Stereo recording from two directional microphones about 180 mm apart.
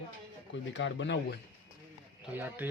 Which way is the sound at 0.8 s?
85° left.